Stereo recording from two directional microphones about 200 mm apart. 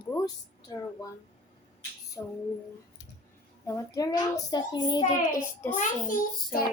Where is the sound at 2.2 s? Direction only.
15° left (ahead or behind).